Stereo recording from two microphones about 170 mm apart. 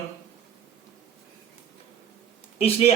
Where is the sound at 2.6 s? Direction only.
35° left (ahead or behind).